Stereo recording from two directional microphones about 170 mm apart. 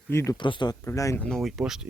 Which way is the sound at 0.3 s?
30° left (ahead or behind).